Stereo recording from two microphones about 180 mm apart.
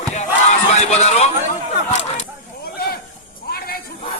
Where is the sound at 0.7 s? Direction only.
40° left (ahead or behind).